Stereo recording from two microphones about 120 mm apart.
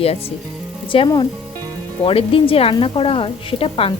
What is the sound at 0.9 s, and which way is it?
Speech, 45° left (ahead or behind).